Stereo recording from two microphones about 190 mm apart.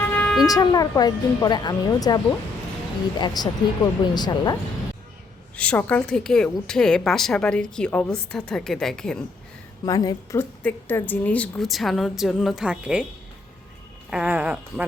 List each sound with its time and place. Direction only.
0.0 s vehicle horn: 10° left (ahead or behind)
0.4 s speech: 20° left (ahead or behind)
5.5 s a woman's voice: 5° left (ahead or behind)
9.8 s speech: 20° left (ahead or behind)
10.6 s a woman's voice: 10° left (ahead or behind)
14.1 s a sound: 5° right (ahead or behind)